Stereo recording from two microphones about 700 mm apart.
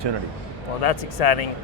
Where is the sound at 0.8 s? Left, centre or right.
Left.